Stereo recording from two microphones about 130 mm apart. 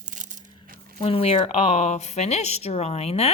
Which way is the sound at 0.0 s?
75° right (ahead or behind).